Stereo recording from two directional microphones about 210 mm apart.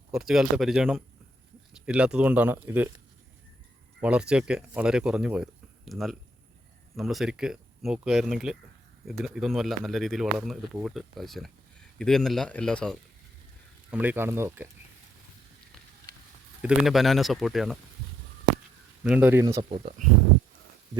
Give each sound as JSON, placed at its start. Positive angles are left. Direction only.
{"t": 0.1, "sound": "speech", "side_deg": 0}
{"t": 4.0, "sound": "speech", "side_deg": -5}
{"t": 13.9, "sound": "speech", "side_deg": -5}
{"t": 16.6, "sound": "speech", "side_deg": -5}
{"t": 19.0, "sound": "speech", "side_deg": -5}
{"t": 19.7, "sound": "speech", "side_deg": -30}